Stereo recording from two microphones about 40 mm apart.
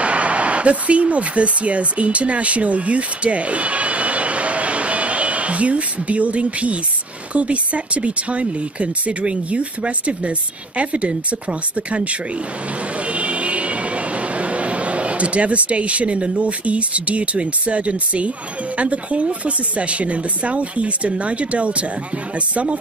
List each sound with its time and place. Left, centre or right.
0.0 s speech: right
13.1 s vehicle: right
18.8 s speech: right